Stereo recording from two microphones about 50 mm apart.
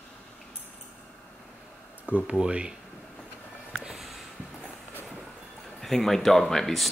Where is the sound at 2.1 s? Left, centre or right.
Right.